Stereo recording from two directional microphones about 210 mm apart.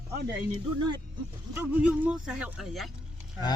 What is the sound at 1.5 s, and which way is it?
Speech, 5° right (ahead or behind).